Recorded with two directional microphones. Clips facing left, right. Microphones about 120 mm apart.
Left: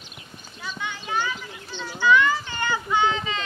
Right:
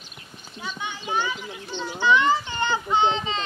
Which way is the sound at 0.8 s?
20° right (ahead or behind).